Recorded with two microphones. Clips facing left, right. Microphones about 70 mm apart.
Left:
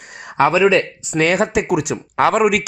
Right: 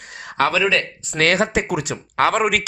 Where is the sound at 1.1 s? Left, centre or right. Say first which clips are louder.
Left 2 dB; centre.